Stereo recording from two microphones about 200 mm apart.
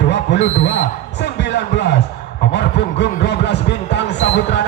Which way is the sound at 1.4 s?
60° left (ahead or behind).